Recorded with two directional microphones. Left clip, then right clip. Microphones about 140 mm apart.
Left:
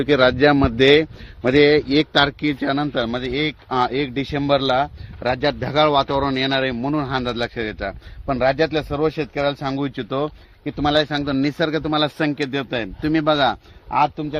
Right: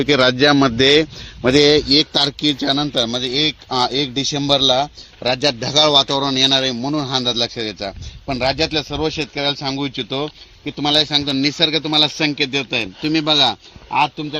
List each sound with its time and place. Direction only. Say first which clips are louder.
0.0 s a man's voice: right 1 dB; 55° right (ahead or behind)
1.4 s a man's voice: right 2 dB; 80° right; by 7.9 s 35° right (ahead or behind)
8.3 s a man's voice: even; 5° left (ahead or behind)